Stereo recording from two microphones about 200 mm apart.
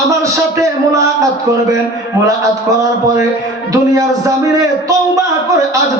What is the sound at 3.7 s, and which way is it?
A man's voice, 15° right (ahead or behind).